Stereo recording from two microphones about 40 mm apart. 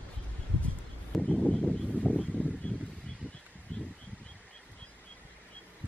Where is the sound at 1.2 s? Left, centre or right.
Centre.